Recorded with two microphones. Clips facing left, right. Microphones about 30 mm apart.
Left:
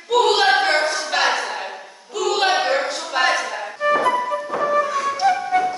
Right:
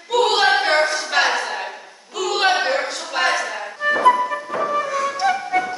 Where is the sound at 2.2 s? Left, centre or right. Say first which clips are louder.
Even; centre.